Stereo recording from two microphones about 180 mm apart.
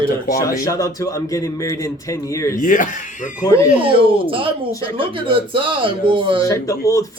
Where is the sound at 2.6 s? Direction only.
45° left (ahead or behind).